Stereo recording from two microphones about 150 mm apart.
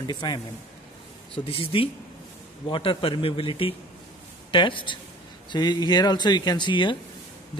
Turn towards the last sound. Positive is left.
turn(degrees=30)  # may be behind; listen again after turning